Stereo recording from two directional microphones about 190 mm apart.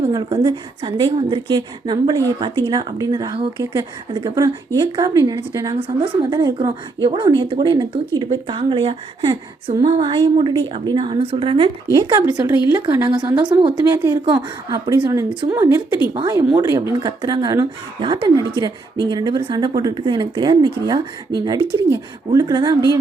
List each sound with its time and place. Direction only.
0.1 s a woman's voice: 20° right (ahead or behind)
12.2 s a woman's voice: 15° right (ahead or behind)
13.7 s a woman's voice: 15° right (ahead or behind)